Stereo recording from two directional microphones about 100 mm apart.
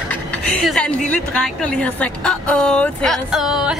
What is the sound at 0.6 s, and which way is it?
A woman's voice, 5° left (ahead or behind).